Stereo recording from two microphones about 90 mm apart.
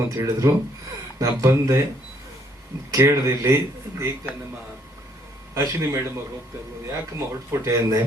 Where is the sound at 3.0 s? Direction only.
30° right (ahead or behind).